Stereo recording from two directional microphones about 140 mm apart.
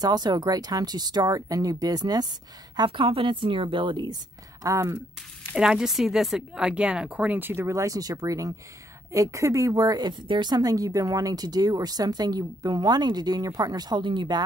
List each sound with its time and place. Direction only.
0.0 s a woman's voice: 30° right (ahead or behind)
4.6 s speech: 20° right (ahead or behind)
5.6 s speech: 5° right (ahead or behind); by 14.4 s 35° right (ahead or behind)